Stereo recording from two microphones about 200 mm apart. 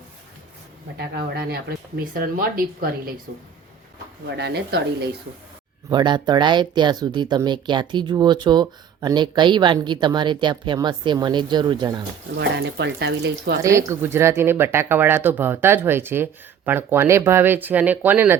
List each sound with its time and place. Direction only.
0.9 s speech: 55° right (ahead or behind)
4.4 s speech: 55° right (ahead or behind)
5.9 s speech: 20° right (ahead or behind)
12.4 s speech: 60° right (ahead or behind)
13.6 s speech: 15° right (ahead or behind)